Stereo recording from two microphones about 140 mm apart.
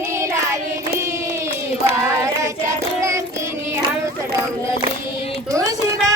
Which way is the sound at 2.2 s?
20° right (ahead or behind).